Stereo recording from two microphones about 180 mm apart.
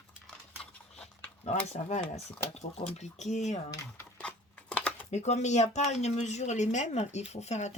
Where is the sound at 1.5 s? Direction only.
35° left (ahead or behind).